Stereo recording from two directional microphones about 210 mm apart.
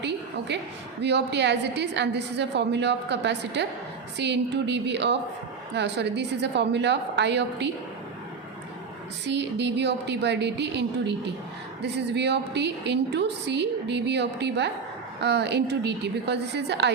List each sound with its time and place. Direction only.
0.0 s a woman's voice: 55° right (ahead or behind)
9.2 s a woman's voice: 55° right (ahead or behind)